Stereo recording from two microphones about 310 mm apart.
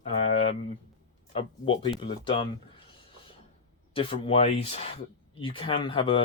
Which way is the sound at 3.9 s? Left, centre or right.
Centre.